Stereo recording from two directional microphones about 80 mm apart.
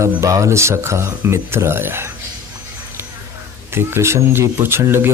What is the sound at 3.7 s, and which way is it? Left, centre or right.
Speech, right.